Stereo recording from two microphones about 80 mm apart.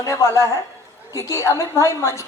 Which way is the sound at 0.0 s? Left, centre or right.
Left.